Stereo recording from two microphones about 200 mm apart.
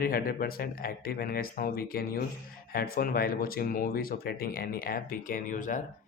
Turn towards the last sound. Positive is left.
turn(degrees=40)  # may be behind; listen again after turning